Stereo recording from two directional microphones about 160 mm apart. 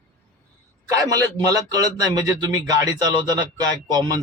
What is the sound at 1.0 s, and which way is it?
Speech, 20° right (ahead or behind).